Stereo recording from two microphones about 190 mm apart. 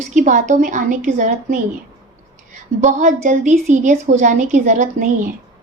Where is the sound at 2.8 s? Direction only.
40° right (ahead or behind).